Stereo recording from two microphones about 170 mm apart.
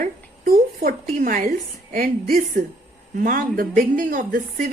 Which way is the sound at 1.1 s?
55° right (ahead or behind).